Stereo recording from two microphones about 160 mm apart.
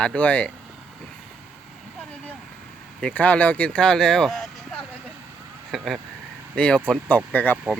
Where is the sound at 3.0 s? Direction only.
5° left (ahead or behind).